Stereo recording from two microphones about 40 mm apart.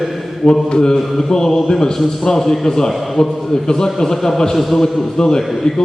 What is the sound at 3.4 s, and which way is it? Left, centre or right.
A man's voice, centre.